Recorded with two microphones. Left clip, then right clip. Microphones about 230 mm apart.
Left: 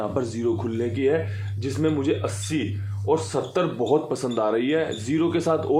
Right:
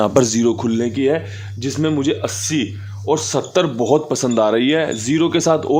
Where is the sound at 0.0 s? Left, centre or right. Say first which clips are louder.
Right 11 dB; right.